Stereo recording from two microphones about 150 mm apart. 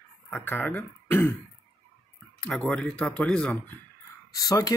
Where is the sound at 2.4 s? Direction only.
5° left (ahead or behind).